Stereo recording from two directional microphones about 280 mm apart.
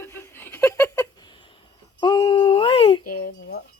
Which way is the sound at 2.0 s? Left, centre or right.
Centre.